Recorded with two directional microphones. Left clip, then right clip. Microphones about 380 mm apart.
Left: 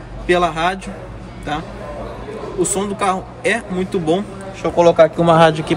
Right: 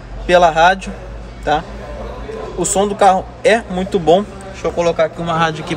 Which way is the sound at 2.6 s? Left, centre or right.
Centre.